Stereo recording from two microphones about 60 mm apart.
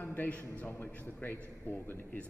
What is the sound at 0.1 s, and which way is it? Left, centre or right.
A man's voice, left.